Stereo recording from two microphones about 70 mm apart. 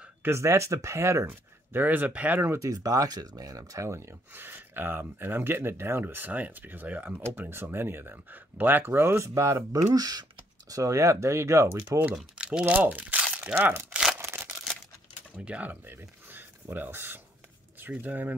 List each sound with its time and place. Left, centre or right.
0.2 s speech: right
2.6 s speech: right
4.3 s speech: right
9.9 s speech: right
10.7 s speech: right
12.2 s speech: centre
13.6 s speech: right
14.2 s a sound: right
15.4 s speech: right